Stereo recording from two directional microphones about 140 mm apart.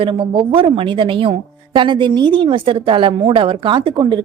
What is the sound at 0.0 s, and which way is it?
A woman's voice, 40° right (ahead or behind).